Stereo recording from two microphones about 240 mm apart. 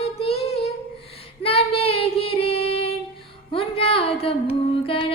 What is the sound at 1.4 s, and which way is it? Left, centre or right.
Child singing, left.